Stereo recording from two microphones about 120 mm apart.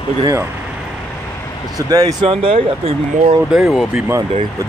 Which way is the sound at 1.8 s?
30° right (ahead or behind).